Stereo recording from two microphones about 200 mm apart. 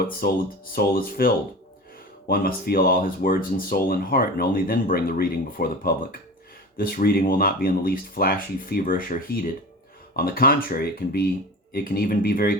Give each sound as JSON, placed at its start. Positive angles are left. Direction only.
{"t": 0.2, "sound": "speech", "side_deg": 50}